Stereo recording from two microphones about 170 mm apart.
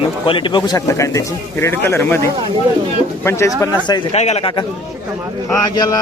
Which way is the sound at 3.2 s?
15° left (ahead or behind).